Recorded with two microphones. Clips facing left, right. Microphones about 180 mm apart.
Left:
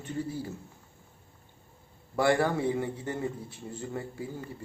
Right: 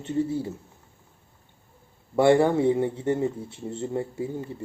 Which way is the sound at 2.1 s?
25° right (ahead or behind).